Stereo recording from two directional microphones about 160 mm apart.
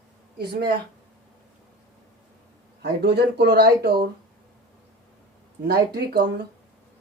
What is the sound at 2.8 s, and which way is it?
Speech, 90° right.